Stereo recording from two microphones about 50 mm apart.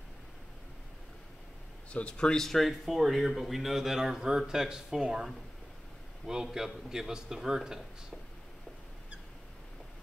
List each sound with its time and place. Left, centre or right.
1.9 s a man's voice: left; by 7.8 s centre